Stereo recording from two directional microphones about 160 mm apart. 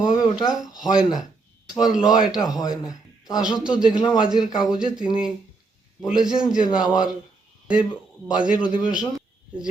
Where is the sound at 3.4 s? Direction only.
5° right (ahead or behind).